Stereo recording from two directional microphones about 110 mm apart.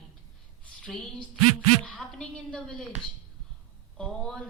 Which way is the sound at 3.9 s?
10° left (ahead or behind).